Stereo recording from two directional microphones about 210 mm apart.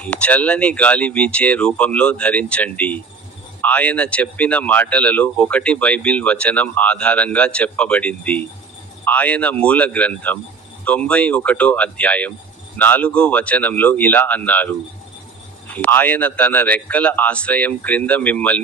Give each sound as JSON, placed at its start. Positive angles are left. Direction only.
{"t": 0.0, "sound": "speech", "side_deg": 5}